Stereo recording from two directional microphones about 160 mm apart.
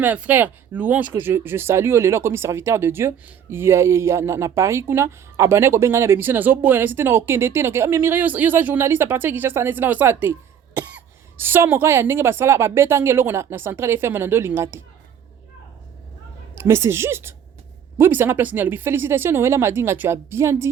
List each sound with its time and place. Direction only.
0.0 s speech: 10° right (ahead or behind)
16.6 s speech: 15° right (ahead or behind)